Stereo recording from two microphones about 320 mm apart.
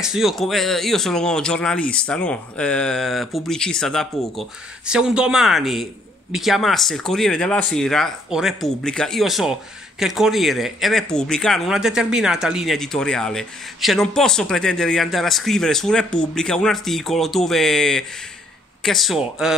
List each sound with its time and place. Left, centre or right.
0.0 s speech: centre